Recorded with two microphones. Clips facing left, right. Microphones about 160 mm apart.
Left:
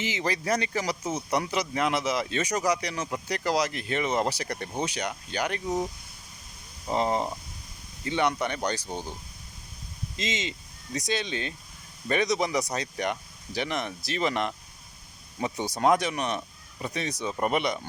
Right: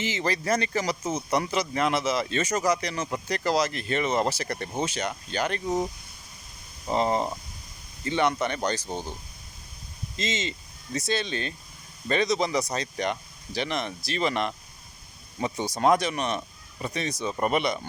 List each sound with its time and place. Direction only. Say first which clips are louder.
0.0 s speech: right 1 dB; 15° left (ahead or behind)
5.6 s speech: right 2 dB; 10° right (ahead or behind)
6.8 s speech: right 1 dB; 10° left (ahead or behind)
8.9 s speech: right 2 dB; 20° right (ahead or behind)
10.2 s speech: right 2 dB; 15° left (ahead or behind)
15.5 s speech: right 1 dB; 15° right (ahead or behind)
15.8 s speech: right 1 dB; 15° left (ahead or behind)